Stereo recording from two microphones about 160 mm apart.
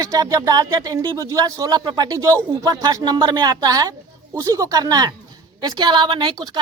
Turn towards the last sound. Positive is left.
turn(degrees=-25)  # may be behind; listen again after turning